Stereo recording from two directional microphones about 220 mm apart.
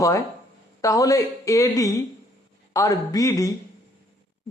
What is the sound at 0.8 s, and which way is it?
A man's voice, 15° left (ahead or behind).